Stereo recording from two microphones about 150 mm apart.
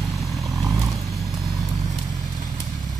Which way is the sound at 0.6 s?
25° right (ahead or behind).